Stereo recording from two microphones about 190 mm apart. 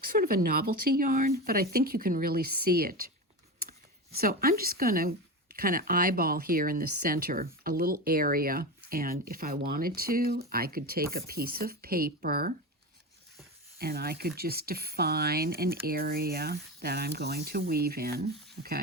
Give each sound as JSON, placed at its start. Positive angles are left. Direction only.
{"t": 0.0, "sound": "speech", "side_deg": -50}
{"t": 13.7, "sound": "speech", "side_deg": -55}